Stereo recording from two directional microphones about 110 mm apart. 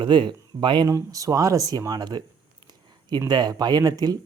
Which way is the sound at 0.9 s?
30° right (ahead or behind).